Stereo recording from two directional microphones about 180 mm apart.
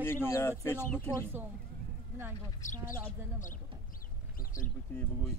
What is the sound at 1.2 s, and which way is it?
Speech, 15° right (ahead or behind).